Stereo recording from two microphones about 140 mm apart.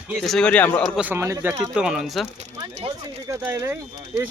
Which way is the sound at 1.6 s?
5° right (ahead or behind).